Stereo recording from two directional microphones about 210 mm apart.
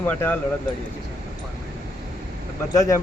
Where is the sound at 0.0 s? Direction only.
10° left (ahead or behind).